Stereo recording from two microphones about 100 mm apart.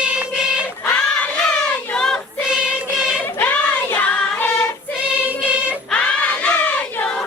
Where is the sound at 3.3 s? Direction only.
15° left (ahead or behind).